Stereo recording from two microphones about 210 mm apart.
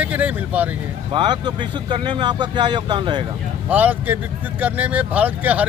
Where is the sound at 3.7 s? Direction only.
10° right (ahead or behind).